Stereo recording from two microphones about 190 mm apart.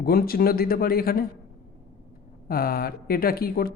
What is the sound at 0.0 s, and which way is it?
Speech, 50° left (ahead or behind).